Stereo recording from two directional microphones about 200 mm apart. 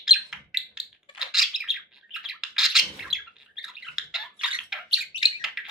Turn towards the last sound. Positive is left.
turn(degrees=0)  # may be behind; listen again after turning